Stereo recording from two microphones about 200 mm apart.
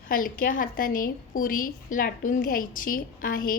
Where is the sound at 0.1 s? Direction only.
45° left (ahead or behind).